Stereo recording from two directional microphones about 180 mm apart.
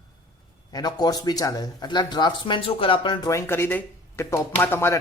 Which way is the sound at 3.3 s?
15° left (ahead or behind).